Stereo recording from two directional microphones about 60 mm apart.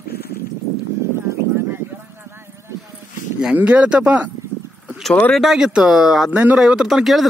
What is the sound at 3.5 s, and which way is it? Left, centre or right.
Speech, right.